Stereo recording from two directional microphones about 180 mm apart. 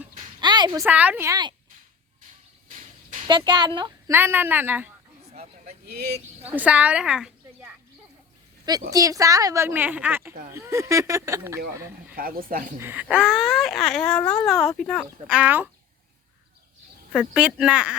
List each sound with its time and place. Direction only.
0.3 s a sound: 25° right (ahead or behind)
0.9 s a woman's voice: 10° right (ahead or behind)
3.2 s a woman's voice: 25° right (ahead or behind)
4.1 s a woman's voice: 10° right (ahead or behind)
5.3 s a sound: 40° right (ahead or behind)
5.8 s speech: 60° right (ahead or behind)
6.5 s a woman's voice: 10° right (ahead or behind)
8.9 s a woman's voice: 20° right (ahead or behind)
12.1 s speech: 55° right (ahead or behind)
12.8 s speech: 10° right (ahead or behind)
17.1 s speech: 5° right (ahead or behind)